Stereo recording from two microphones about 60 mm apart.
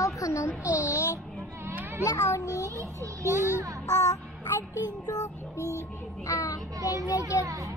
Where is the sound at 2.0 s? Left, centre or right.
Left.